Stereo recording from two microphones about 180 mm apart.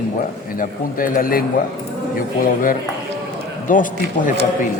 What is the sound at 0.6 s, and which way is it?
Speech, 50° left (ahead or behind).